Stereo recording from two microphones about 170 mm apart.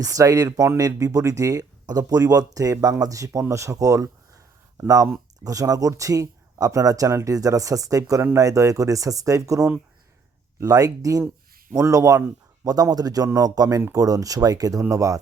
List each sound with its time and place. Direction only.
0.0 s speech: 20° right (ahead or behind)